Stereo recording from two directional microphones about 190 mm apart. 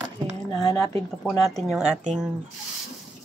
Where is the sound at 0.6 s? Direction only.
15° left (ahead or behind).